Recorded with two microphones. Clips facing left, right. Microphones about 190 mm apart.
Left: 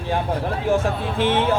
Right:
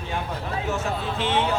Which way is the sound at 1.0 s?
55° left (ahead or behind).